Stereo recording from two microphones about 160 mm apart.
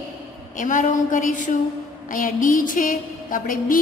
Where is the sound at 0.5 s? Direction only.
50° left (ahead or behind).